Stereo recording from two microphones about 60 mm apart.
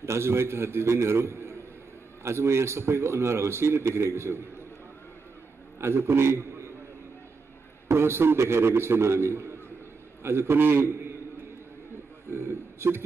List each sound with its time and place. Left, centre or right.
0.0 s speech: right
5.8 s a man's voice: right
7.9 s speech: right
12.3 s a sound: right